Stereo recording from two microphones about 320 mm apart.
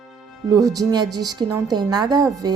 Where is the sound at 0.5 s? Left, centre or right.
Centre.